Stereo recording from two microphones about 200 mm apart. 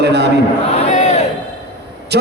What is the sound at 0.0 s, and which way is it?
Speech, 55° right (ahead or behind).